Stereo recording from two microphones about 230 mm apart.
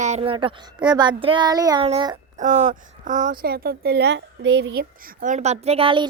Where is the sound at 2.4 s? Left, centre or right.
Right.